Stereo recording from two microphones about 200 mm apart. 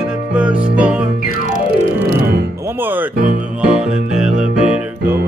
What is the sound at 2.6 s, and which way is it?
Music, 10° right (ahead or behind).